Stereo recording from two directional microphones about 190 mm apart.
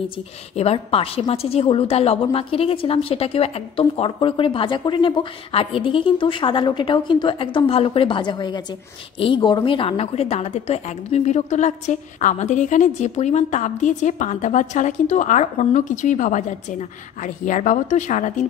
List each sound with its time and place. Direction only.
0.6 s a woman's voice: 30° left (ahead or behind)